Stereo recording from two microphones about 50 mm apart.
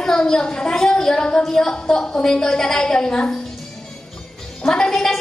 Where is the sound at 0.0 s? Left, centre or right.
Centre.